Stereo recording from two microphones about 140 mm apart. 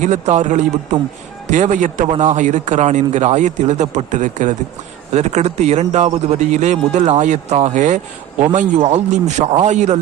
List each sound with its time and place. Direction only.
0.0 s speech: 60° right (ahead or behind)